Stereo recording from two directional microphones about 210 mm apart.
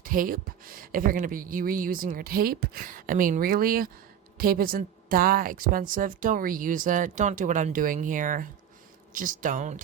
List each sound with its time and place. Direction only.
0.0 s a woman's voice: 40° right (ahead or behind)